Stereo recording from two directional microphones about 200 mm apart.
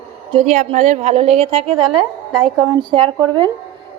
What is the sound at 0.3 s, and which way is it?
A woman's voice, 35° right (ahead or behind).